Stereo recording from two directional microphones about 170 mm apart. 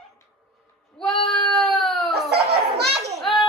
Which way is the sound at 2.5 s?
75° right (ahead or behind).